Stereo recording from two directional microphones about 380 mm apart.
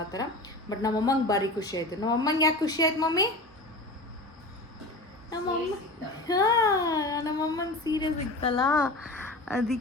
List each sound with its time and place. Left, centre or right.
0.1 s a woman's voice: centre
6.2 s a woman's voice: centre